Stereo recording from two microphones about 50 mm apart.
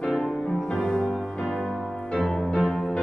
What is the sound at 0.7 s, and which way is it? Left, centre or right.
Music, centre.